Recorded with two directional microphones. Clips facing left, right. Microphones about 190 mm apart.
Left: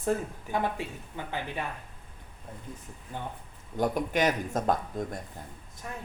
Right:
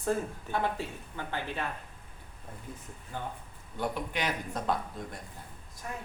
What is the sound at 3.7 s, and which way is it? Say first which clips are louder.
Speech: left 6 dB; 45° left (ahead or behind).